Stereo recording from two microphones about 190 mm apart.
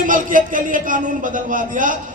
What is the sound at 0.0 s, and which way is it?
A man's voice, 45° right (ahead or behind).